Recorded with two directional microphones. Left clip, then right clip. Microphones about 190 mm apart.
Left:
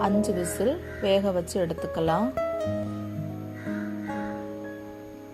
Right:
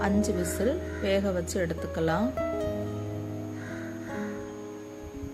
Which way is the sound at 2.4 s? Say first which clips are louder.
Left 2 dB; centre (ahead or behind).